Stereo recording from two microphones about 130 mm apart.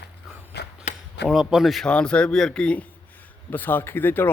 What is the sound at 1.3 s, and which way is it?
A man's voice, 5° right (ahead or behind).